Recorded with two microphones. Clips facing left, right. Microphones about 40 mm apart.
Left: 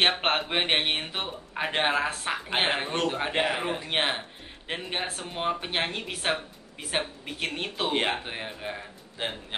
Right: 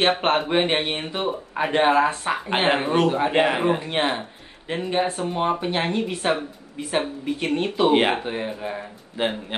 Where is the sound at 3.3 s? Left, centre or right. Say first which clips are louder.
Right 7 dB; centre.